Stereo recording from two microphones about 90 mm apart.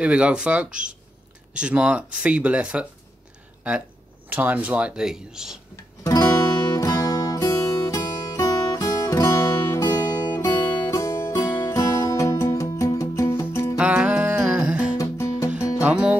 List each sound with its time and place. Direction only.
0.0 s speech: 10° right (ahead or behind)
4.3 s speech: 20° right (ahead or behind)
6.0 s music: 50° left (ahead or behind)
10.9 s music: 35° left (ahead or behind)
13.7 s music: 15° right (ahead or behind)
15.0 s music: 40° left (ahead or behind)
15.8 s music: 15° right (ahead or behind)